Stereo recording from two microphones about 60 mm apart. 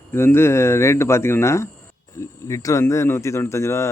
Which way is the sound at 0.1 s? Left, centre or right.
Left.